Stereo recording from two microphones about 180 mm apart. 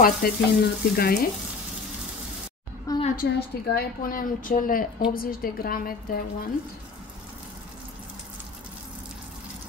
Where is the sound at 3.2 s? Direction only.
60° left (ahead or behind).